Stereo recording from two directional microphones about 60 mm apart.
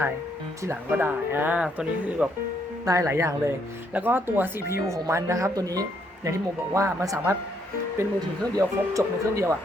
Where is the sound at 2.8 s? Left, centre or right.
Right.